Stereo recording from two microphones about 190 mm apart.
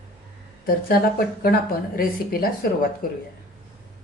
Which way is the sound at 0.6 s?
50° left (ahead or behind).